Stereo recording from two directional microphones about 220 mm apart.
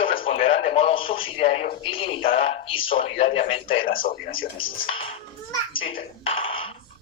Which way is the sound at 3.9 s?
40° left (ahead or behind).